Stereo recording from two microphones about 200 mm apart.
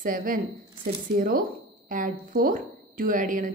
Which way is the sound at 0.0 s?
45° right (ahead or behind).